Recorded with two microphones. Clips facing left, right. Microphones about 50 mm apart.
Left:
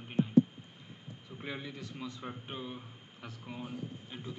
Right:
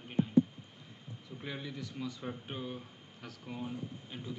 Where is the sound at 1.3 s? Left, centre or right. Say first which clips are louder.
Even; centre.